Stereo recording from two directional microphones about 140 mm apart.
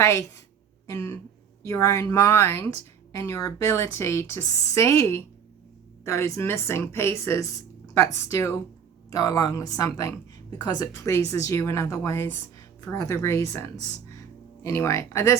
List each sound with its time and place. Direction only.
0.0 s a woman's voice: 20° left (ahead or behind)
14.2 s music: 20° left (ahead or behind)